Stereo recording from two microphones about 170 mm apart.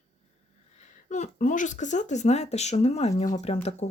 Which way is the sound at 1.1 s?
45° left (ahead or behind).